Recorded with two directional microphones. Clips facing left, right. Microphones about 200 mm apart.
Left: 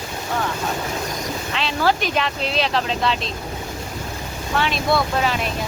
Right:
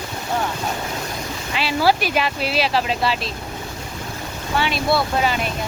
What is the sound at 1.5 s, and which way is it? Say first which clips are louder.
Speech: right 3 dB; 10° right (ahead or behind).